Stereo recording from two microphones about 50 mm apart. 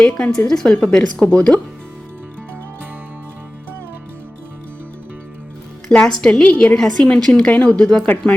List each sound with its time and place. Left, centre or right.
0.0 s speech: centre
6.0 s speech: centre
6.7 s speech: centre